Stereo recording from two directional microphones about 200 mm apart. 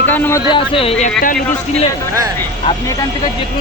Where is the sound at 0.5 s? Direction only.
25° left (ahead or behind).